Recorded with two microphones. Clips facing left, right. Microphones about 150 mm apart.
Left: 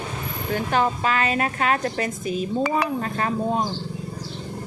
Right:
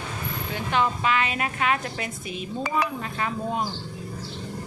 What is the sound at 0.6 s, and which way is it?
A woman's voice, 40° left (ahead or behind).